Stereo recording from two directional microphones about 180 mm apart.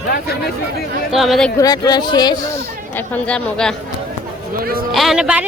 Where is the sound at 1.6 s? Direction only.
20° left (ahead or behind).